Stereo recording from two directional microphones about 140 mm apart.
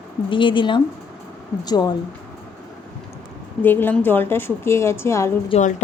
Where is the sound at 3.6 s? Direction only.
15° left (ahead or behind).